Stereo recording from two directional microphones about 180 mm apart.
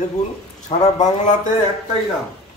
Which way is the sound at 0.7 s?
30° left (ahead or behind).